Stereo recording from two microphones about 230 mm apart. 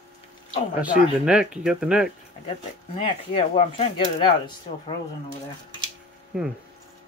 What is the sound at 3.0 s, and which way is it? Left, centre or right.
Speech, left.